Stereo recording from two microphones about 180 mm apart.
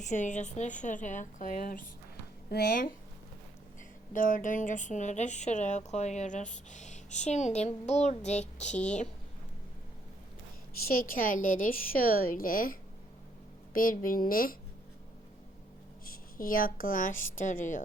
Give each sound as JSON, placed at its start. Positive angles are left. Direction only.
{"t": 0.0, "sound": "a woman's voice", "side_deg": 40}
{"t": 2.5, "sound": "speech", "side_deg": 65}
{"t": 4.1, "sound": "a woman's voice", "side_deg": 50}
{"t": 10.8, "sound": "a woman's voice", "side_deg": 55}
{"t": 13.7, "sound": "a woman's voice", "side_deg": 50}
{"t": 16.0, "sound": "a woman's voice", "side_deg": 55}